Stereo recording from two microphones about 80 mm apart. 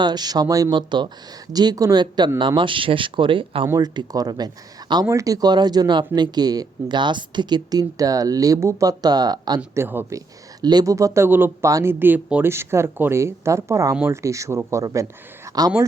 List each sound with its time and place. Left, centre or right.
0.0 s speech: right
0.7 s speech: right
1.5 s speech: right
2.6 s speech: right
3.8 s speech: right
5.0 s speech: right
9.7 s speech: right
10.6 s speech: right
10.9 s speech: right
11.3 s speech: right
11.6 s speech: right
15.5 s speech: right